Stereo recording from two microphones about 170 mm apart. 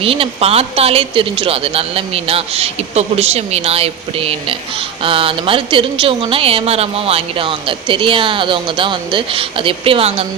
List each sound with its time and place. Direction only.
0.0 s speech: 35° right (ahead or behind)